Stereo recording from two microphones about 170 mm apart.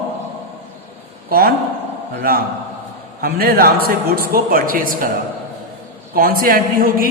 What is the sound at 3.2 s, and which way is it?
A man's voice, 60° right (ahead or behind).